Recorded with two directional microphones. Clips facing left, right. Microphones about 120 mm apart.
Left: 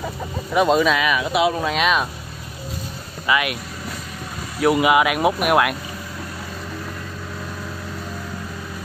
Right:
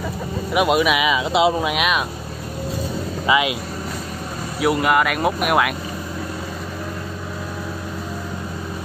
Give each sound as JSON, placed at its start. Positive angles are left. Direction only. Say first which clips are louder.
{"t": 0.5, "sound": "speech", "louder": "left 1 dB", "side_deg": -10}
{"t": 3.3, "sound": "speech", "louder": "right 2 dB", "side_deg": -20}
{"t": 4.6, "sound": "speech", "louder": "left 2 dB", "side_deg": 0}